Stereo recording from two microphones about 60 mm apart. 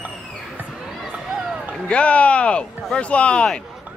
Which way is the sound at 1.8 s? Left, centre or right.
Left.